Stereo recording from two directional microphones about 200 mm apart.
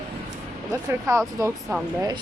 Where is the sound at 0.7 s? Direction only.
15° right (ahead or behind).